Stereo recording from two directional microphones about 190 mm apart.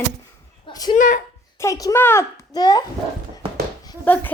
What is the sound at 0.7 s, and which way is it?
A woman's voice, 20° left (ahead or behind).